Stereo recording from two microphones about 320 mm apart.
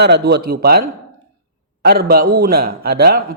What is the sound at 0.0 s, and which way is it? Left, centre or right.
A man's voice, right.